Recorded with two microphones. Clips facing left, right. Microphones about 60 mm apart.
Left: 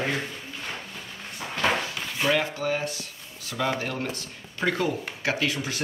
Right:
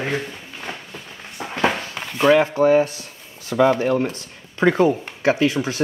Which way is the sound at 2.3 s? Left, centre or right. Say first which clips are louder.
Right 11 dB; right.